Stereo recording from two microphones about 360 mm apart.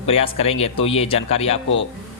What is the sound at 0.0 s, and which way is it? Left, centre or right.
Speech, centre.